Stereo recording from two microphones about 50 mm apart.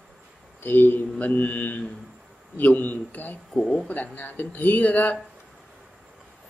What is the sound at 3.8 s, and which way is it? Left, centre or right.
A man's voice, left.